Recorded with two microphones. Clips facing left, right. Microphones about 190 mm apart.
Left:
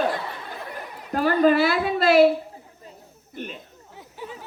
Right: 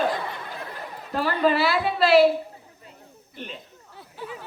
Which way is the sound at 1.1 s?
45° left (ahead or behind).